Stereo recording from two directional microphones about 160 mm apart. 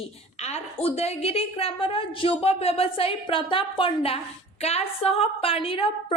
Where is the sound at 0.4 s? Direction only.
40° left (ahead or behind).